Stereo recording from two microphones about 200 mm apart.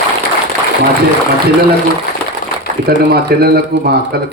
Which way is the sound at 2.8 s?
50° right (ahead or behind).